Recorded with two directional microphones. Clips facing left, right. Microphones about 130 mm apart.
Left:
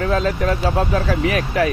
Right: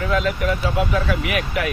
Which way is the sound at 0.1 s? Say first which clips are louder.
Right 1 dB; 40° left (ahead or behind).